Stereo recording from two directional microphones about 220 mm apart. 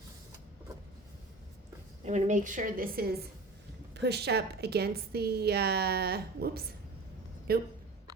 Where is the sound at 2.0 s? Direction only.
35° right (ahead or behind).